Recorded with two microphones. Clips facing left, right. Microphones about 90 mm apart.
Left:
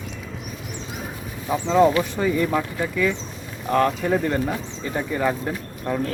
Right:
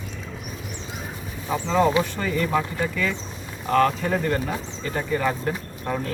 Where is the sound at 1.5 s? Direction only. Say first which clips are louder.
Left 3 dB; 20° left (ahead or behind).